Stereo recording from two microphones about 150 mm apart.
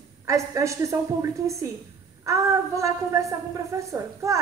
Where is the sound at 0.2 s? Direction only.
20° right (ahead or behind).